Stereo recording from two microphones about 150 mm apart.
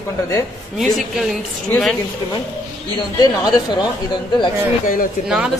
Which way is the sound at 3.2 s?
30° left (ahead or behind).